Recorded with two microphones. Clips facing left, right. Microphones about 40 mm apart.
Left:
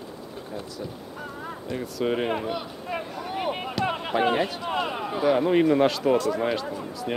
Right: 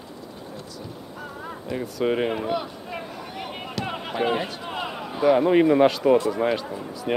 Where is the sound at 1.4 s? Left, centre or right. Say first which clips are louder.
Right 2 dB; centre.